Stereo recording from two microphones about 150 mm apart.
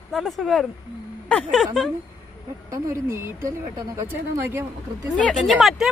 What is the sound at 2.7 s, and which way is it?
Speech, 20° right (ahead or behind).